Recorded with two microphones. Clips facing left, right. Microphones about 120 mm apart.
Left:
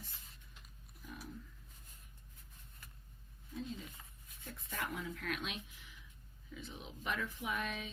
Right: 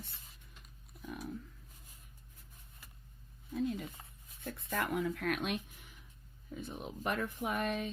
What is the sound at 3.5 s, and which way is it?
Speech, 60° right (ahead or behind).